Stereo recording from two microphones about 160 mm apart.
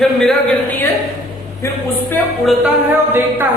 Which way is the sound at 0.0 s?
5° left (ahead or behind).